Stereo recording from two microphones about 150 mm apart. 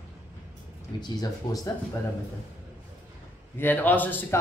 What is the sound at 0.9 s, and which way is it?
Speech, 25° left (ahead or behind).